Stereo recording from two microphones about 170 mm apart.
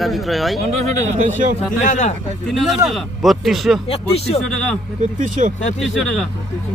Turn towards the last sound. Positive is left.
turn(degrees=0)  # may be behind; listen again after turning